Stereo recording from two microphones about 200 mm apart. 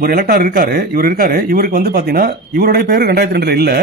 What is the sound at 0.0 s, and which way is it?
Speech, 50° right (ahead or behind).